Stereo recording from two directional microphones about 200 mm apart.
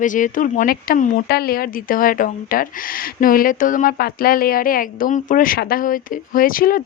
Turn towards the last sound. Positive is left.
turn(degrees=45)  # may be behind; listen again after turning